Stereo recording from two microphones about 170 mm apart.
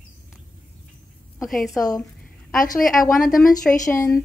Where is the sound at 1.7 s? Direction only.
20° left (ahead or behind).